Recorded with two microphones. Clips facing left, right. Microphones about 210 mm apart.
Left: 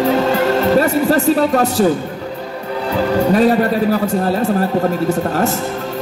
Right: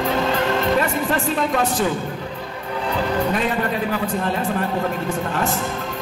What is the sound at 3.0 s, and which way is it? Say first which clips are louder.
A man's voice: left 9 dB; 40° left (ahead or behind).